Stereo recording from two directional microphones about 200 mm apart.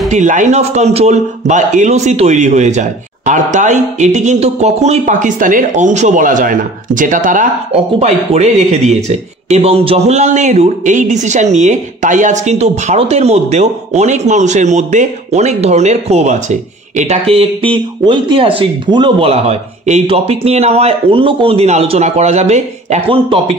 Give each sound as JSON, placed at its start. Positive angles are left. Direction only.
{"t": 0.1, "sound": "a man's voice", "side_deg": -40}